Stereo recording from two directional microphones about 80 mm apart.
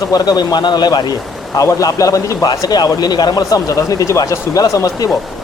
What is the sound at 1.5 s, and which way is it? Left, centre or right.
A man's voice, left.